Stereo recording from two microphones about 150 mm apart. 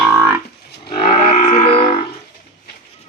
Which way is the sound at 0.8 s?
90° left.